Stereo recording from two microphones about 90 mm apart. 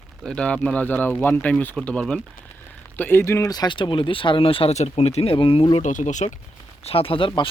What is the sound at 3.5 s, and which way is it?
Speech, 50° left (ahead or behind).